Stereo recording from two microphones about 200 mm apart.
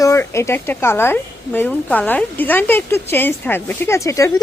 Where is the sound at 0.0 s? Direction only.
15° left (ahead or behind).